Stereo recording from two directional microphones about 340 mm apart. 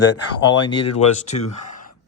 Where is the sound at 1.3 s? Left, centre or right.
Left.